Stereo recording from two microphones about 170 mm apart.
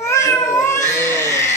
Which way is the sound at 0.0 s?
20° left (ahead or behind).